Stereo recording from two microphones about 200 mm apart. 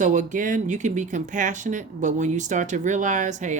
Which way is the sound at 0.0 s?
40° right (ahead or behind).